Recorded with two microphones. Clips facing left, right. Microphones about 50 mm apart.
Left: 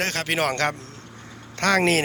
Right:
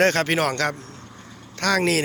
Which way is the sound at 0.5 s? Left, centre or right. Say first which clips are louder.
Even; left.